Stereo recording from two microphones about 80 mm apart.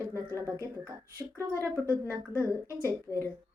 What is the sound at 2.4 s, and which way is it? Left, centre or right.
Speech, right.